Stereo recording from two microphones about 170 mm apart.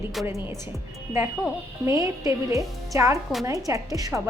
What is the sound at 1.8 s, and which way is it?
A woman's voice, 20° right (ahead or behind).